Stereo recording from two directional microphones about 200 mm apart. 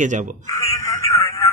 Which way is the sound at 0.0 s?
40° right (ahead or behind).